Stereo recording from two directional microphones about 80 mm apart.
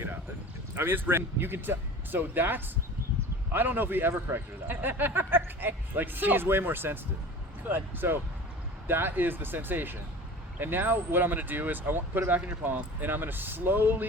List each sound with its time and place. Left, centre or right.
0.8 s speech: right